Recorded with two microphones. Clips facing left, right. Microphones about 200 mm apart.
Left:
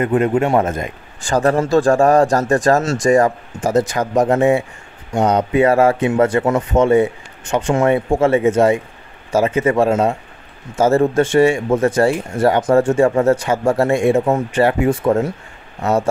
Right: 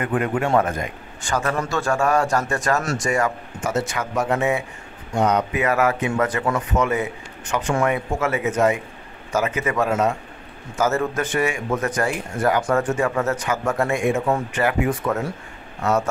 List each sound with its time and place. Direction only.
0.0 s a man's voice: 25° left (ahead or behind)